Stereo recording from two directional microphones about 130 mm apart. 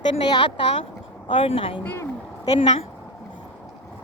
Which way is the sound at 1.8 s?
15° left (ahead or behind).